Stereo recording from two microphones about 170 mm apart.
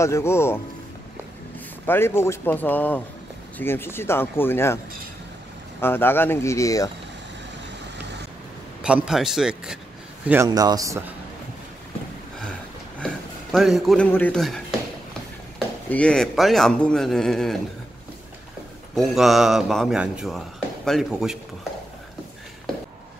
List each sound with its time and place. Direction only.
0.0 s speech: 15° left (ahead or behind)
1.9 s speech: 15° left (ahead or behind)
5.8 s speech: 15° left (ahead or behind)
8.8 s speech: 5° right (ahead or behind)
10.2 s speech: 15° right (ahead or behind)
13.0 s a sound: centre (ahead or behind)
14.1 s speech: 5° left (ahead or behind)
15.9 s speech: 5° left (ahead or behind)
18.9 s speech: centre (ahead or behind)